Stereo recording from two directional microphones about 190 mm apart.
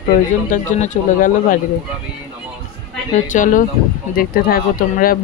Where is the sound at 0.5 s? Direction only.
45° left (ahead or behind).